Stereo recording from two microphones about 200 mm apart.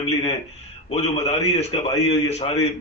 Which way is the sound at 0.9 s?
30° left (ahead or behind).